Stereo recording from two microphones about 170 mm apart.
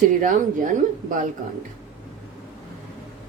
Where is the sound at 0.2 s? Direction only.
50° right (ahead or behind).